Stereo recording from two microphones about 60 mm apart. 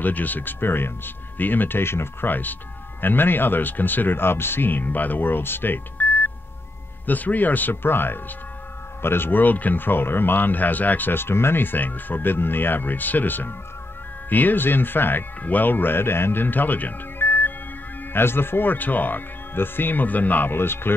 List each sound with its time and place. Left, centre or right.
0.0 s speech: left